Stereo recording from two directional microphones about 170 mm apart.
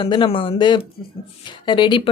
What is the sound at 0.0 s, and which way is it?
A woman's voice, 30° left (ahead or behind).